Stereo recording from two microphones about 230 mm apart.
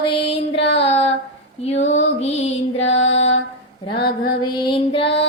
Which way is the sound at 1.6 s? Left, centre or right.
Left.